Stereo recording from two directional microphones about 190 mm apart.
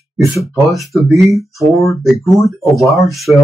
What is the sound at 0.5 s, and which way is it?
Speech, centre (ahead or behind).